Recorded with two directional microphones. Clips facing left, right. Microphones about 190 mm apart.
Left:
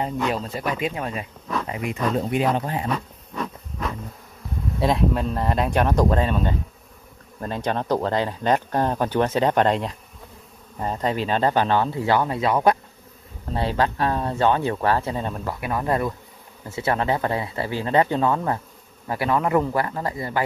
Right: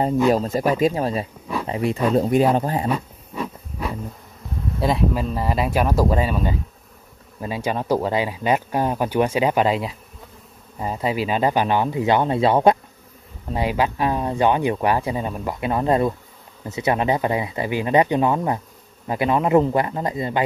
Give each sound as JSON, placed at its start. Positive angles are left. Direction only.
{"t": 0.3, "sound": "speech", "side_deg": -40}
{"t": 2.9, "sound": "a sound", "side_deg": -10}
{"t": 4.7, "sound": "speech", "side_deg": 0}
{"t": 13.5, "sound": "speech", "side_deg": -10}
{"t": 15.6, "sound": "a man's voice", "side_deg": -25}